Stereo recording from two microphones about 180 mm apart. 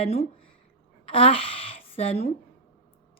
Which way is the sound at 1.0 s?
30° left (ahead or behind).